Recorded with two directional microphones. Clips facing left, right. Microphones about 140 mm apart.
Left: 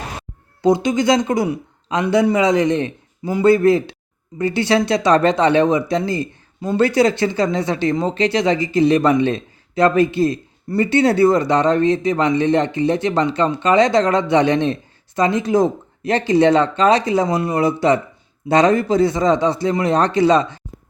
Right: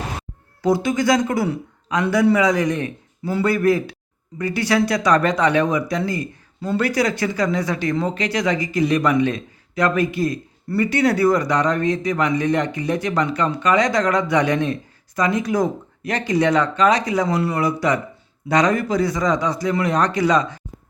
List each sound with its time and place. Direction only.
0.6 s speech: 20° left (ahead or behind)